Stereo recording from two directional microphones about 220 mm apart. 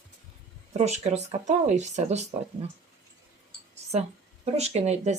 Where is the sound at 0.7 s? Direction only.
30° right (ahead or behind).